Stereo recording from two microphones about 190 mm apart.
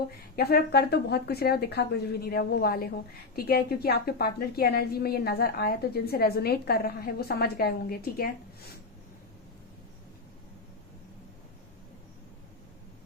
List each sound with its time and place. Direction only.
0.3 s a woman's voice: 55° left (ahead or behind)